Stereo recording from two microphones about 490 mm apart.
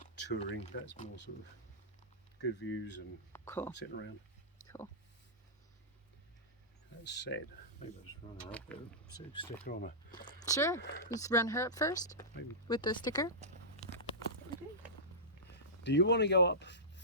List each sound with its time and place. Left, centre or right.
0.0 s speech: centre
2.4 s speech: left
3.3 s speech: centre
3.8 s speech: left
7.0 s speech: left
8.4 s speech: centre
15.8 s speech: left